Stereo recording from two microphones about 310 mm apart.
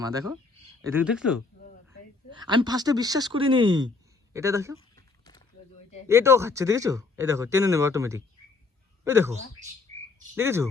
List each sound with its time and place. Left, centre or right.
0.0 s speech: centre
2.4 s speech: centre
6.1 s speech: centre
9.9 s chirp: centre
10.3 s speech: centre